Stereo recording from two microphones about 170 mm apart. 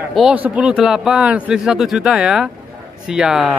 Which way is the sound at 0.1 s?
5° right (ahead or behind).